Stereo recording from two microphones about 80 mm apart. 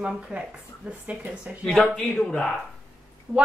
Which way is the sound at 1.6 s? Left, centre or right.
Centre.